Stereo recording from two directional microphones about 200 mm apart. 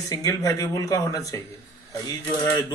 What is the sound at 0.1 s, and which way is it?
Speech, 15° left (ahead or behind).